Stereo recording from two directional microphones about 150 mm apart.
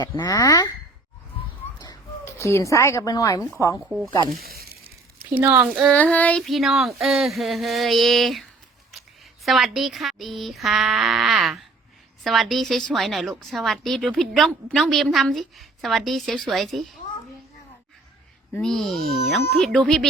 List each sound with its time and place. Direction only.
0.0 s speech: 25° left (ahead or behind)
1.8 s speech: 20° left (ahead or behind)
3.8 s a woman's voice: centre (ahead or behind)
4.4 s a sound: 85° right
5.2 s speech: 15° right (ahead or behind)
5.9 s a woman's voice: 10° left (ahead or behind)
18.5 s a woman's voice: 5° left (ahead or behind)